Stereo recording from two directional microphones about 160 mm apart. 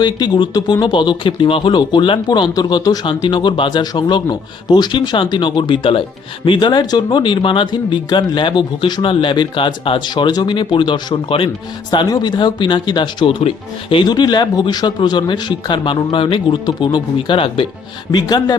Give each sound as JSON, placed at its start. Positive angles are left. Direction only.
{"t": 0.0, "sound": "speech", "side_deg": 25}